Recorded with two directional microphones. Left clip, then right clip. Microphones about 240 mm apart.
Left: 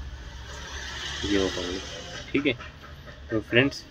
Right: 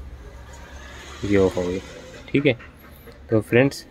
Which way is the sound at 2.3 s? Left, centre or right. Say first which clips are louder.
Right 6 dB; right.